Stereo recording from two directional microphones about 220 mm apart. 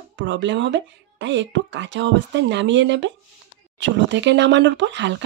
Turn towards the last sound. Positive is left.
turn(degrees=-55)  # may be behind; listen again after turning